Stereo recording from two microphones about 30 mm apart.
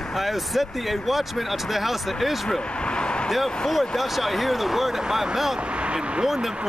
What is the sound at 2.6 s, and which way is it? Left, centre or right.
Vehicle, left.